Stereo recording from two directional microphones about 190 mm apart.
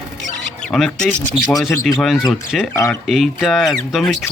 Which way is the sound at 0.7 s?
5° left (ahead or behind).